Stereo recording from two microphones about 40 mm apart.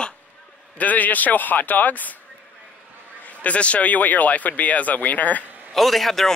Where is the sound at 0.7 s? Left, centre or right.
Left.